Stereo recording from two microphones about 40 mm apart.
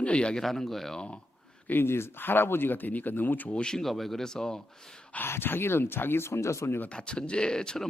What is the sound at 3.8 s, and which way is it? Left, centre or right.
Speech, centre.